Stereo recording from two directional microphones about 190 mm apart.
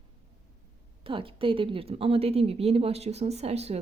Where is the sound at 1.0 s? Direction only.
30° right (ahead or behind).